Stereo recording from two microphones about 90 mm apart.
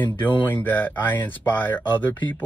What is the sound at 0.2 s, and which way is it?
Speech, 20° left (ahead or behind).